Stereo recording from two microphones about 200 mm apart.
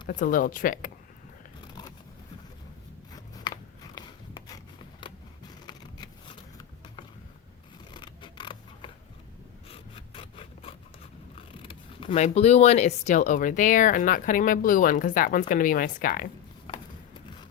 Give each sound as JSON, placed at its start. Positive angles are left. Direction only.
{"t": 0.1, "sound": "speech", "side_deg": 40}
{"t": 3.1, "sound": "a sound", "side_deg": 20}
{"t": 7.9, "sound": "scissors", "side_deg": 25}
{"t": 9.6, "sound": "rub", "side_deg": 25}
{"t": 11.3, "sound": "speech", "side_deg": 25}